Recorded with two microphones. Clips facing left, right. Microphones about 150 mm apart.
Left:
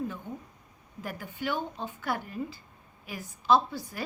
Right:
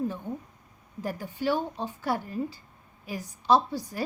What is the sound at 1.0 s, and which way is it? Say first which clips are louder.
A woman's voice: right 5 dB; 35° right (ahead or behind).